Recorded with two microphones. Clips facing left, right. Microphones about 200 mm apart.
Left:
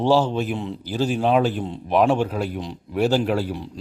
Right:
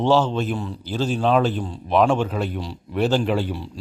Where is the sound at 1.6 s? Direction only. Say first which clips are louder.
Left 1 dB; 20° left (ahead or behind).